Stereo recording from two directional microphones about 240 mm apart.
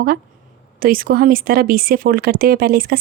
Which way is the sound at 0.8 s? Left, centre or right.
Right.